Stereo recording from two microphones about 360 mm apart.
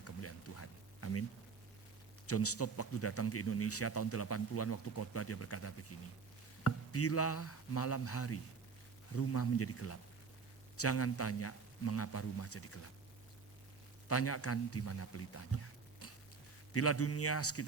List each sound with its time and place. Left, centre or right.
0.0 s a sound: left
2.2 s a man's voice: left
14.1 s a man's voice: left